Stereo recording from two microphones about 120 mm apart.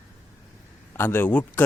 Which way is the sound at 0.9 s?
20° left (ahead or behind).